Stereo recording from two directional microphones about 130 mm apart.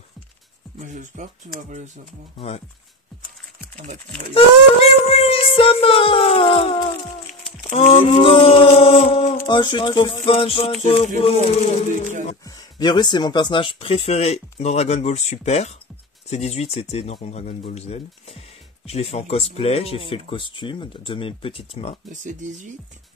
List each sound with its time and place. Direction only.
0.7 s speech: 70° right (ahead or behind)
2.3 s speech: 55° left (ahead or behind)
4.3 s speech: 50° left (ahead or behind)
9.5 s speech: 35° left (ahead or behind)
10.2 s speech: 50° left (ahead or behind)
12.4 s speech: 35° left (ahead or behind)
22.1 s speech: 80° right